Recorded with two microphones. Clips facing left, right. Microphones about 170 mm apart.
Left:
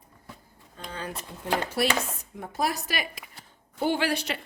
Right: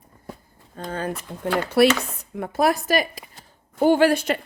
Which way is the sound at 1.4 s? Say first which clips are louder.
Right 9 dB; 70° right (ahead or behind).